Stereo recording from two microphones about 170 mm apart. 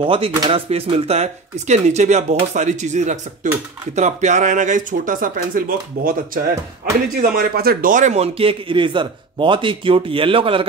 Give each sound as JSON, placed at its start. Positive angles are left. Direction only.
{"t": 0.0, "sound": "a man's voice", "side_deg": -30}